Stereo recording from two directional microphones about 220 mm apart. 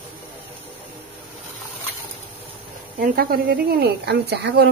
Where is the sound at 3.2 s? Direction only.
45° right (ahead or behind).